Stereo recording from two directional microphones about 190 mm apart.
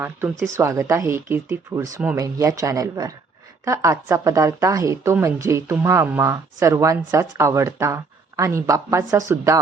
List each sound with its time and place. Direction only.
0.0 s speech: 10° right (ahead or behind)